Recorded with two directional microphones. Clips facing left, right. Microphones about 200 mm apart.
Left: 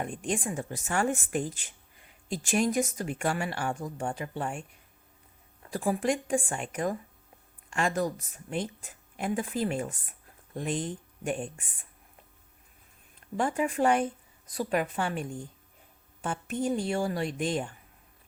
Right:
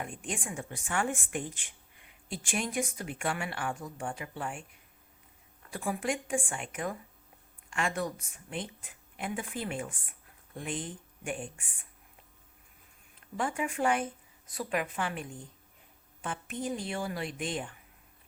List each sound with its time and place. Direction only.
0.3 s a woman's voice: 40° left (ahead or behind)
5.7 s a woman's voice: 35° left (ahead or behind)
13.3 s a woman's voice: 40° left (ahead or behind)